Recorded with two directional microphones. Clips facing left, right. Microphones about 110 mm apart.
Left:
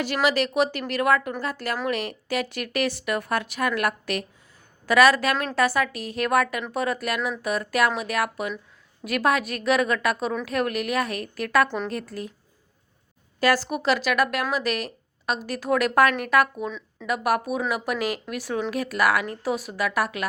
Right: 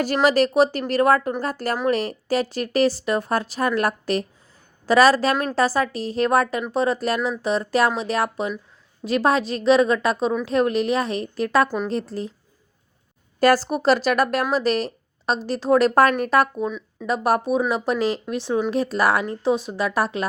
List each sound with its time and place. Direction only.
0.0 s speech: 40° right (ahead or behind)
13.4 s speech: 40° right (ahead or behind)
16.6 s speech: 10° right (ahead or behind)
17.1 s speech: 30° right (ahead or behind)